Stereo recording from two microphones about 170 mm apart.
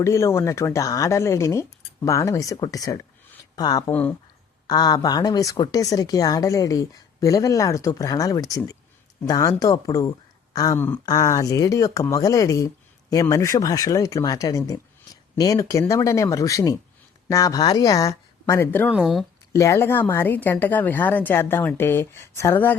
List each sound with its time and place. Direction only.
0.0 s a woman's voice: 15° left (ahead or behind)
18.9 s speech: centre (ahead or behind)
19.5 s a woman's voice: 15° left (ahead or behind)